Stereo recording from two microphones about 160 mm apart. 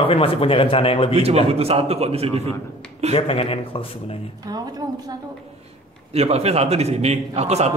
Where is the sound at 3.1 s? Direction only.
40° left (ahead or behind).